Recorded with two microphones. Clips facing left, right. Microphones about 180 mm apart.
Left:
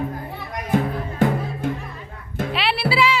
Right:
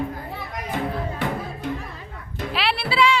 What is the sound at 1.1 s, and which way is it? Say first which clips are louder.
Music: left 6 dB; 50° left (ahead or behind).